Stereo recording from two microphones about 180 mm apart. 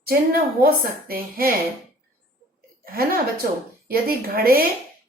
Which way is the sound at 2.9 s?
55° right (ahead or behind).